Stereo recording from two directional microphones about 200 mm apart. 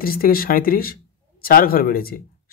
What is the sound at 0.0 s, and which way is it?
Speech, 45° left (ahead or behind).